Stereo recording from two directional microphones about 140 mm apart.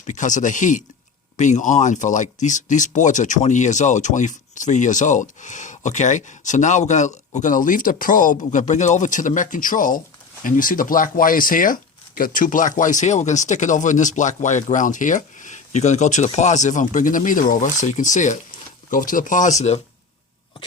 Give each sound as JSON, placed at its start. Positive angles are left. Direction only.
{"t": 0.0, "sound": "speech", "side_deg": 60}
{"t": 8.5, "sound": "speech", "side_deg": 60}
{"t": 18.9, "sound": "speech", "side_deg": 75}